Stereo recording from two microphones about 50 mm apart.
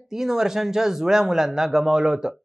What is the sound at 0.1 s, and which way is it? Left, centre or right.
Speech, centre.